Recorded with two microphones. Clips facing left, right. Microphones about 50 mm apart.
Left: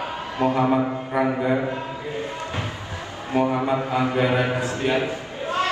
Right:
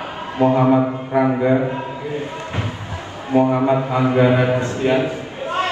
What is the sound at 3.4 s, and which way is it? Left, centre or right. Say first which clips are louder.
Speech: right 4 dB; right.